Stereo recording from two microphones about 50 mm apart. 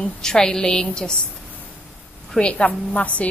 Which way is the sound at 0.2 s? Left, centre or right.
Centre.